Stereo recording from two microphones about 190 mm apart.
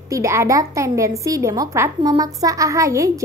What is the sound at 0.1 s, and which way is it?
A woman's voice, 15° right (ahead or behind).